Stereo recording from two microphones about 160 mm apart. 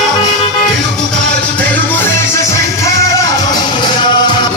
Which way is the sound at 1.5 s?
10° left (ahead or behind).